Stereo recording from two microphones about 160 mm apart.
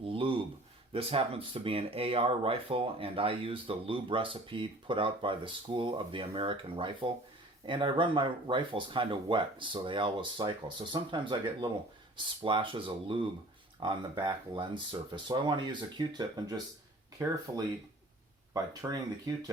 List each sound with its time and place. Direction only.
0.1 s a sound: 35° right (ahead or behind)
0.9 s speech: 35° right (ahead or behind); by 17.3 s 20° right (ahead or behind)
18.5 s speech: 20° right (ahead or behind)